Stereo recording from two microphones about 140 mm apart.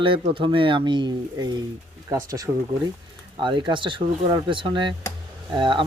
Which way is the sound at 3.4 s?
35° right (ahead or behind).